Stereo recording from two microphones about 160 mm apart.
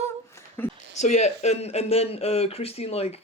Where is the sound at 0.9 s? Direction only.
45° left (ahead or behind).